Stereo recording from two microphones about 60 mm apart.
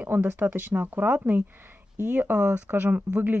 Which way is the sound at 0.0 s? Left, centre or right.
Right.